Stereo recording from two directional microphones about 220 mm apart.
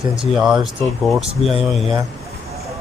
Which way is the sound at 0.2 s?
5° right (ahead or behind).